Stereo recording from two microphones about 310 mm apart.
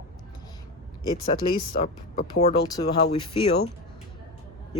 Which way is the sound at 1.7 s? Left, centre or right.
Left.